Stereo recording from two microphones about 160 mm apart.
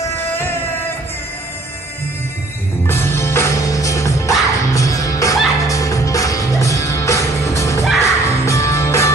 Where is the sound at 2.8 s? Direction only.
15° left (ahead or behind).